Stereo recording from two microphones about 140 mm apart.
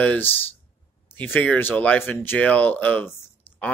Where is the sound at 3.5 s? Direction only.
45° left (ahead or behind).